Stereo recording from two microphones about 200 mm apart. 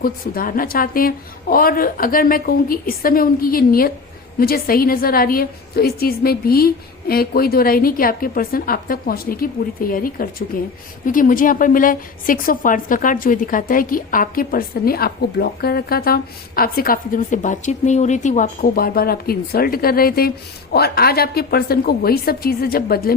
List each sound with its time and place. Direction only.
0.0 s a woman's voice: 45° left (ahead or behind)